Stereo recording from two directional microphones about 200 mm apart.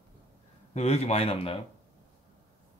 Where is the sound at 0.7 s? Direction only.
30° left (ahead or behind).